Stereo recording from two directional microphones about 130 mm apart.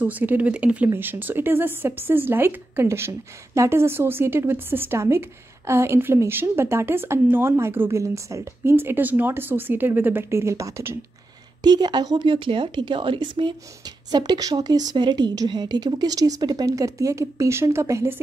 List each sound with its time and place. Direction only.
0.0 s speech: 15° right (ahead or behind)
11.6 s speech: 35° right (ahead or behind)